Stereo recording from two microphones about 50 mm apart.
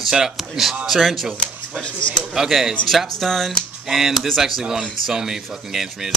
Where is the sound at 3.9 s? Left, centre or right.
Centre.